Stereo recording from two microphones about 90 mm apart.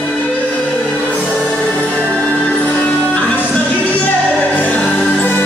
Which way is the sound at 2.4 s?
15° left (ahead or behind).